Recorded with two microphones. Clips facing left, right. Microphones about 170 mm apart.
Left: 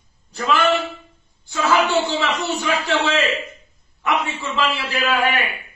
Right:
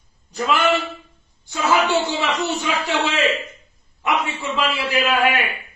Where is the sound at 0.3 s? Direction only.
15° right (ahead or behind).